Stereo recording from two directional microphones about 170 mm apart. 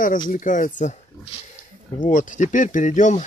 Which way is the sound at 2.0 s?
45° left (ahead or behind).